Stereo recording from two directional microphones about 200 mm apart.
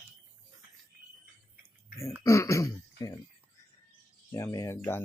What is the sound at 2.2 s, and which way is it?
Speech, 15° left (ahead or behind).